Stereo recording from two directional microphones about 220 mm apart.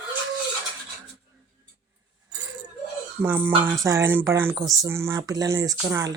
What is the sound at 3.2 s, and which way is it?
Speech, 10° right (ahead or behind).